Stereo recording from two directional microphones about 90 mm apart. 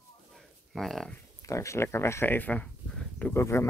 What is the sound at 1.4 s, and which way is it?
Speech, 35° left (ahead or behind).